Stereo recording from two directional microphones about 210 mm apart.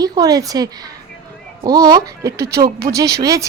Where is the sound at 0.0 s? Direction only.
15° right (ahead or behind).